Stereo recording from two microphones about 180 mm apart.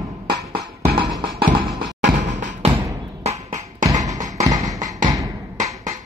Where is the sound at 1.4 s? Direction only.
50° right (ahead or behind).